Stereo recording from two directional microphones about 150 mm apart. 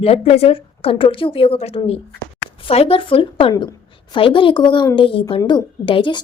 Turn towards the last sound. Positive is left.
turn(degrees=35)  # may be behind; listen again after turning